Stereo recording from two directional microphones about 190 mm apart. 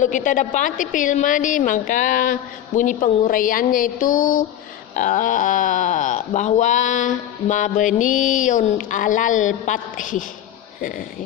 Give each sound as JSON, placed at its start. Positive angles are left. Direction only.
{"t": 0.0, "sound": "a woman's voice", "side_deg": 40}